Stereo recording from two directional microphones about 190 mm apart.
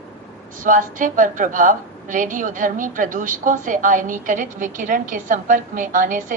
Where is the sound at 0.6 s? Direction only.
45° right (ahead or behind).